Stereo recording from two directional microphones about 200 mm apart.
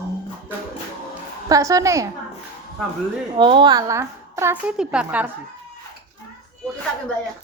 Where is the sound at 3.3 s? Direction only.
25° right (ahead or behind); by 5.3 s 5° right (ahead or behind).